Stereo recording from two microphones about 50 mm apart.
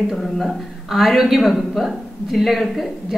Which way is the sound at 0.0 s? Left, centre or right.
Centre.